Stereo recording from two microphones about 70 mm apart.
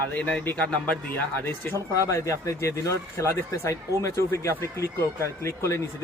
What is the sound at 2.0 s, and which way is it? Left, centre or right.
Speech, left.